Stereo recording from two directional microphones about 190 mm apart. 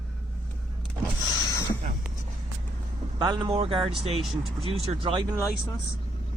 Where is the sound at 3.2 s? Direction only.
20° right (ahead or behind).